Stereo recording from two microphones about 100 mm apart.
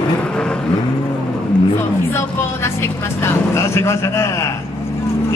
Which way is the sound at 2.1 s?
25° left (ahead or behind).